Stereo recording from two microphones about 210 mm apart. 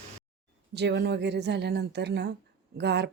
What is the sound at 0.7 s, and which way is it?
A woman's voice, 55° right (ahead or behind).